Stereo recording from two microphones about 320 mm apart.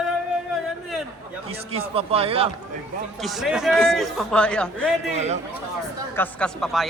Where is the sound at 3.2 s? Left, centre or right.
Centre.